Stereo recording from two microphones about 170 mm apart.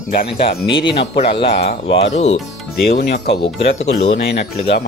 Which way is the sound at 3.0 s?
75° left (ahead or behind).